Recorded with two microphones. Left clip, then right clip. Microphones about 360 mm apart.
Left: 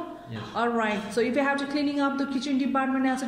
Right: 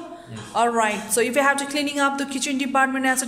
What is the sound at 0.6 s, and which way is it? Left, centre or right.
A woman's voice, centre.